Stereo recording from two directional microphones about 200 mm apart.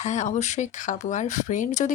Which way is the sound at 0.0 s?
35° left (ahead or behind).